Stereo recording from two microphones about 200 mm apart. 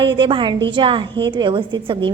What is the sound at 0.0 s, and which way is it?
A woman's voice, 25° right (ahead or behind).